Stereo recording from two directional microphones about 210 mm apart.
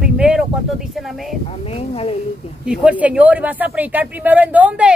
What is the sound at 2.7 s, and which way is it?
A woman's voice, 5° right (ahead or behind).